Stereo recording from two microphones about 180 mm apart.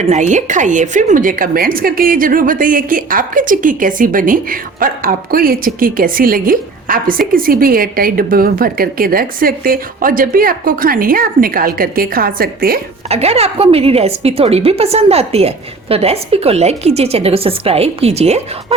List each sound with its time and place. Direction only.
0.0 s a woman's voice: 40° right (ahead or behind)
13.1 s a woman's voice: 35° right (ahead or behind)